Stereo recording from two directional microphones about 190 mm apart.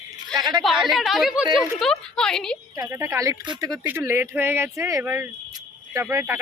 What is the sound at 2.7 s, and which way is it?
Speech, 15° right (ahead or behind).